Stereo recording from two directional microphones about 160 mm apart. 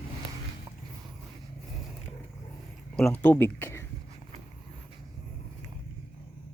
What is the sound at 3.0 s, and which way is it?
Speech, 5° left (ahead or behind).